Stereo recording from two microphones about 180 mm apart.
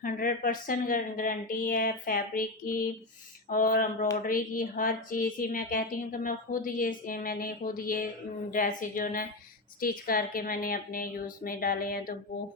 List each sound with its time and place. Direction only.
0.0 s speech: 50° left (ahead or behind)